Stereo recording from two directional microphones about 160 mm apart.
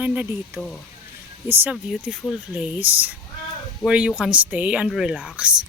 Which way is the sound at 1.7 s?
Centre (ahead or behind).